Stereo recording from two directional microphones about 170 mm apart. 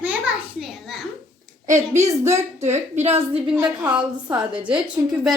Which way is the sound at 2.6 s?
40° right (ahead or behind).